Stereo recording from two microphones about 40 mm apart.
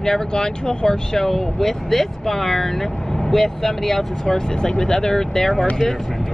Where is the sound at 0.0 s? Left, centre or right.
Centre.